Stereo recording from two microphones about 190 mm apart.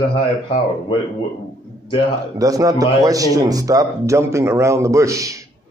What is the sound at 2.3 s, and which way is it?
A man's voice, 20° right (ahead or behind).